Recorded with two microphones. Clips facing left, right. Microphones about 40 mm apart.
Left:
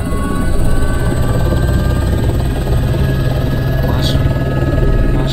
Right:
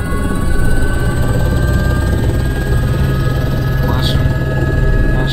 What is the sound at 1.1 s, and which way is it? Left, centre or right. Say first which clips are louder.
Helicopter: left 1 dB; centre.